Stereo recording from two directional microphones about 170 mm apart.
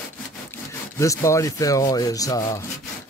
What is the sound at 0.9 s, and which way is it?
Speech, 20° left (ahead or behind).